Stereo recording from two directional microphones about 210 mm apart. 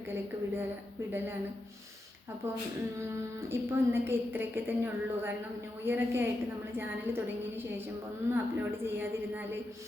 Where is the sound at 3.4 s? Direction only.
10° right (ahead or behind).